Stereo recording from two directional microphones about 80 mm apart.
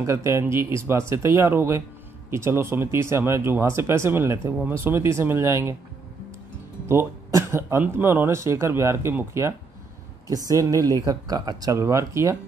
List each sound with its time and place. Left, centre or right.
0.0 s speech: right
6.9 s speech: right
10.2 s speech: right
11.7 s speech: right